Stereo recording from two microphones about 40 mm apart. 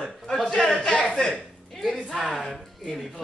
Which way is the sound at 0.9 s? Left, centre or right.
Left.